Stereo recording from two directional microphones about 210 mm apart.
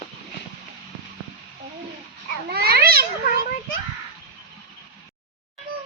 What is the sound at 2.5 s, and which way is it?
Cat, 50° right (ahead or behind).